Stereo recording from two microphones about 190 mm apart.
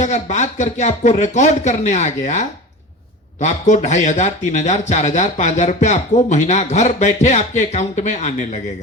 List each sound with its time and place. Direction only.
0.0 s speech: 35° left (ahead or behind)